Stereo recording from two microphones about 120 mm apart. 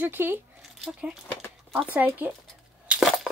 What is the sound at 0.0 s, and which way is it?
Speech, 15° right (ahead or behind).